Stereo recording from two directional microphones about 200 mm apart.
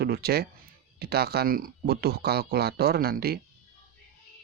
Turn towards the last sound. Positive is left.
turn(degrees=-50)  # may be behind; listen again after turning